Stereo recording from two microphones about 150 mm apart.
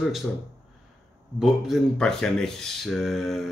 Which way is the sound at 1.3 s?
5° right (ahead or behind).